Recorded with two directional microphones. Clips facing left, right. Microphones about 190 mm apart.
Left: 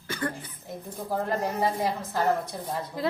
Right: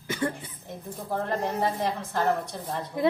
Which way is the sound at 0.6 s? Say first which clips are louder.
Left 1 dB; centre (ahead or behind).